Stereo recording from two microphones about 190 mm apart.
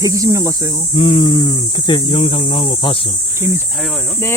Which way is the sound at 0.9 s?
30° left (ahead or behind).